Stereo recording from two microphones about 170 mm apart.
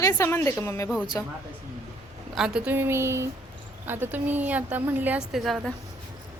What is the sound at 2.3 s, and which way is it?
A woman's voice, 5° right (ahead or behind).